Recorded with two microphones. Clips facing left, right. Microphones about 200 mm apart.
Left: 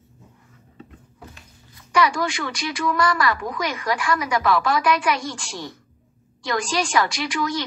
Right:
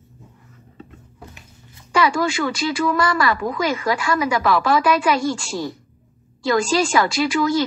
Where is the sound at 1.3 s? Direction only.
25° right (ahead or behind).